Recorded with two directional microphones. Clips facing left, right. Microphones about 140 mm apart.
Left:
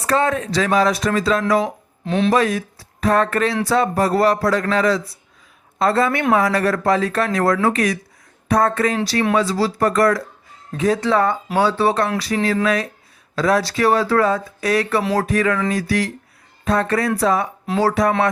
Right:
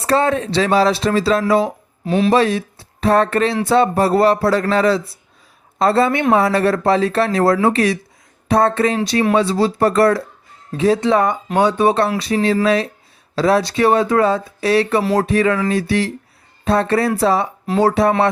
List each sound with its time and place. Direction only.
0.0 s speech: 30° right (ahead or behind)
2.0 s speech: 5° right (ahead or behind)
2.3 s speech: 30° right (ahead or behind)